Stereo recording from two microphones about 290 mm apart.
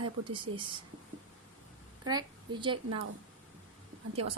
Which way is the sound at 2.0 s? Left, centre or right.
Centre.